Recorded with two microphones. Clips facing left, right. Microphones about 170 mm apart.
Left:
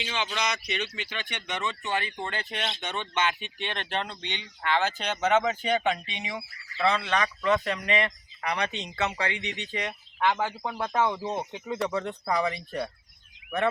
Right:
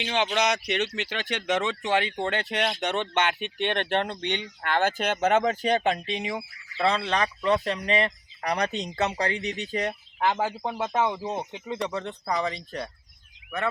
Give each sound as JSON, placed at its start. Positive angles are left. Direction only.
{"t": 0.0, "sound": "speech", "side_deg": -60}
{"t": 2.8, "sound": "speech", "side_deg": -65}
{"t": 10.8, "sound": "speech", "side_deg": -15}
{"t": 12.4, "sound": "speech", "side_deg": 5}